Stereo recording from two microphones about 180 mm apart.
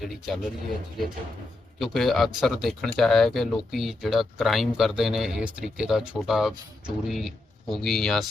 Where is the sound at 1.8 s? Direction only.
Centre (ahead or behind).